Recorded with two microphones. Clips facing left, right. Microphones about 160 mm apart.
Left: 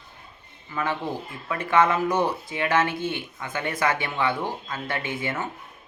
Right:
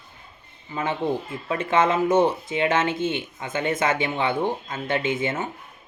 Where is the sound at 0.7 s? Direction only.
20° right (ahead or behind).